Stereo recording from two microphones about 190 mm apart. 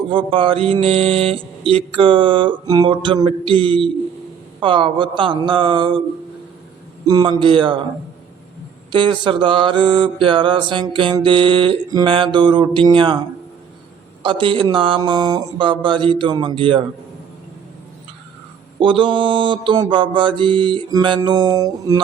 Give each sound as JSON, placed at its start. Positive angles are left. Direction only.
{"t": 0.1, "sound": "mantra", "side_deg": -30}
{"t": 7.1, "sound": "mantra", "side_deg": -25}
{"t": 8.9, "sound": "mantra", "side_deg": -25}
{"t": 18.8, "sound": "mantra", "side_deg": -25}